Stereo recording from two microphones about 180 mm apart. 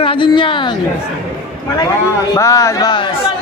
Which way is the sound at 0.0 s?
30° left (ahead or behind).